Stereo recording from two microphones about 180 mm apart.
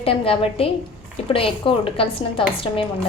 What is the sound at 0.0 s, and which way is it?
Speech, 30° left (ahead or behind).